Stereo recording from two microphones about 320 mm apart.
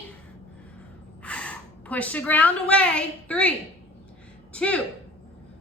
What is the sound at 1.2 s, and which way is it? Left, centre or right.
A woman's voice, centre.